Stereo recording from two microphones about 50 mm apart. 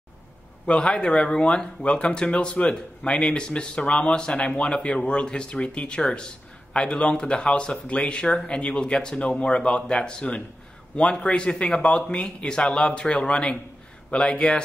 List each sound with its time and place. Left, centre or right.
0.7 s speech: left